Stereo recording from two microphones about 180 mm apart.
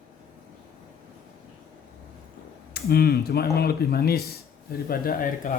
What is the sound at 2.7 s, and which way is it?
Speech, 60° left (ahead or behind).